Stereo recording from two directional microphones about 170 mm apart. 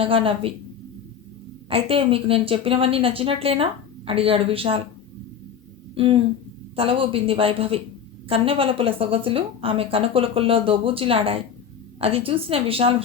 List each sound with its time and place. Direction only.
0.0 s a woman's voice: 30° right (ahead or behind)
1.7 s a woman's voice: 35° right (ahead or behind)
5.9 s a sound: 30° right (ahead or behind)
6.7 s a woman's voice: 35° right (ahead or behind)